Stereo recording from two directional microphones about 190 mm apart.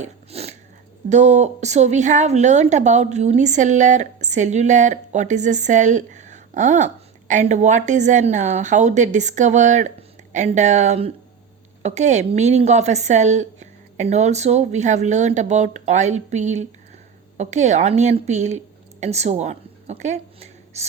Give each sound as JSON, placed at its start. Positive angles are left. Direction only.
{"t": 0.0, "sound": "biting", "side_deg": -35}
{"t": 1.1, "sound": "a woman's voice", "side_deg": -40}